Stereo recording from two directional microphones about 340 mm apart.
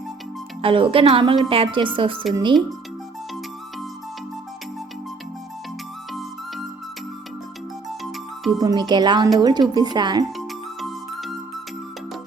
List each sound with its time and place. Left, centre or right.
0.6 s speech: centre
8.5 s speech: centre
10.3 s music: centre